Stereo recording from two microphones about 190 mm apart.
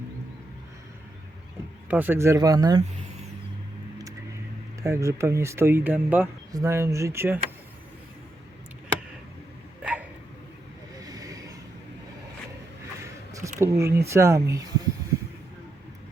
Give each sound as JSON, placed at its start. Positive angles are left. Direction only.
{"t": 1.9, "sound": "speech", "side_deg": -10}
{"t": 4.8, "sound": "speech", "side_deg": -15}
{"t": 9.8, "sound": "dog", "side_deg": -10}
{"t": 11.1, "sound": "vehicle", "side_deg": -20}
{"t": 13.0, "sound": "a sound", "side_deg": -15}
{"t": 13.6, "sound": "speech", "side_deg": -15}